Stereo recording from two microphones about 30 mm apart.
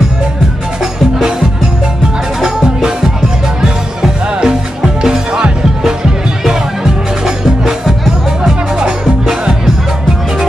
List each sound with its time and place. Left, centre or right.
2.4 s music: centre
8.4 s music: right